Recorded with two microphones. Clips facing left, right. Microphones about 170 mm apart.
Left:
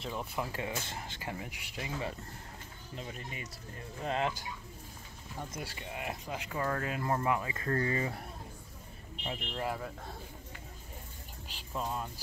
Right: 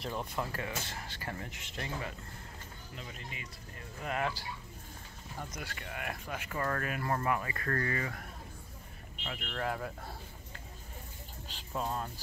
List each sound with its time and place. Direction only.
0.0 s speech: centre (ahead or behind)
0.4 s speech: 15° left (ahead or behind)
3.0 s speech: 40° left (ahead or behind)
4.0 s speech: 25° left (ahead or behind)
5.5 s speech: 30° left (ahead or behind); by 6.8 s 10° left (ahead or behind)
6.8 s speech: 20° left (ahead or behind)
9.6 s speech: 5° left (ahead or behind)
11.7 s speech: 5° right (ahead or behind)